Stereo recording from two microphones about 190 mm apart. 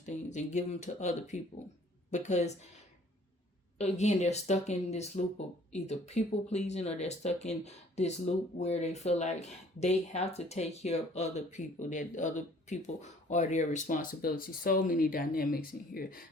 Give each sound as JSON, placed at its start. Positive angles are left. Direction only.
{"t": 0.0, "sound": "speech", "side_deg": 40}
{"t": 3.8, "sound": "speech", "side_deg": 35}